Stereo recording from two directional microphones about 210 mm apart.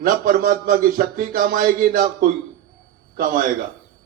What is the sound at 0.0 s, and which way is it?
Speech, 45° right (ahead or behind).